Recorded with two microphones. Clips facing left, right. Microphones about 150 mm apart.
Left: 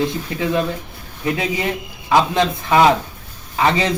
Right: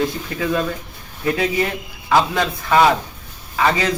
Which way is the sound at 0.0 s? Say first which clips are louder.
Left 1 dB; 20° left (ahead or behind).